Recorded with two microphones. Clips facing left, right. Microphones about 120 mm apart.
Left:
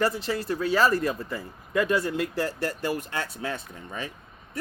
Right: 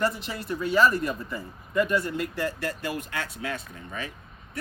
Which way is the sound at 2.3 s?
35° left (ahead or behind).